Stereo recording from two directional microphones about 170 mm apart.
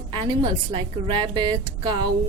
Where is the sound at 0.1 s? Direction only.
25° right (ahead or behind).